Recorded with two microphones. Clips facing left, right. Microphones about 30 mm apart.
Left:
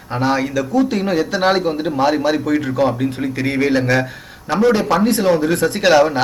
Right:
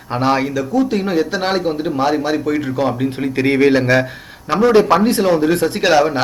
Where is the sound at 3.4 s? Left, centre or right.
Right.